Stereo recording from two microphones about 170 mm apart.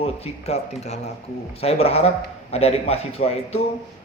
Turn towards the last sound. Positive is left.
turn(degrees=35)  # may be behind; listen again after turning